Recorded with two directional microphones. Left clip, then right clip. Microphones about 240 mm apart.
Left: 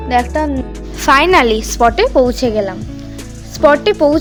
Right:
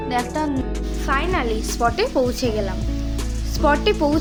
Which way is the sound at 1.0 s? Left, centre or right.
Left.